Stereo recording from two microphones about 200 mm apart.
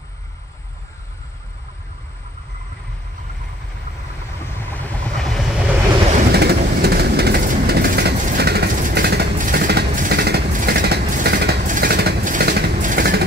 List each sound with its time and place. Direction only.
4.4 s vehicle: 10° left (ahead or behind)
6.3 s train: 50° right (ahead or behind)